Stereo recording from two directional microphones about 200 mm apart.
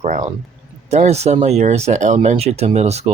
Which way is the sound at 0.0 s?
40° right (ahead or behind).